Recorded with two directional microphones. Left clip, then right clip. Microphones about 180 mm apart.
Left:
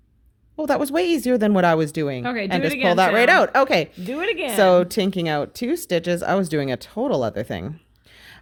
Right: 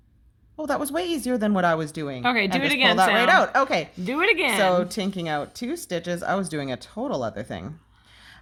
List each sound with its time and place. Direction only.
0.6 s speech: 50° left (ahead or behind)
2.2 s speech: 25° right (ahead or behind)
3.2 s speech: 55° left (ahead or behind)
4.1 s speech: 25° right (ahead or behind)
4.5 s speech: 55° left (ahead or behind)